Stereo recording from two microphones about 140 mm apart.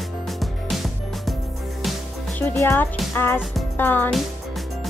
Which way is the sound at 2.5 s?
20° left (ahead or behind).